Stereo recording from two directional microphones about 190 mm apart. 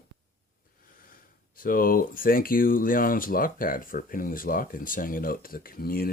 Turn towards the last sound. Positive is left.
turn(degrees=50)  # may be behind; listen again after turning